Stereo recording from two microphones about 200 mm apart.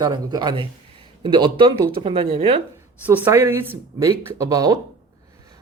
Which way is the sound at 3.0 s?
10° right (ahead or behind).